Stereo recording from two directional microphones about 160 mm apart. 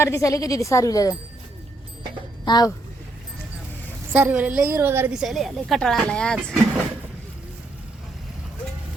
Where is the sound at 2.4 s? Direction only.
25° left (ahead or behind).